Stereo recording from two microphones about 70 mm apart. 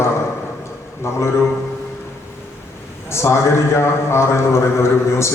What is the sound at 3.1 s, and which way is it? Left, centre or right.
A man's voice, left.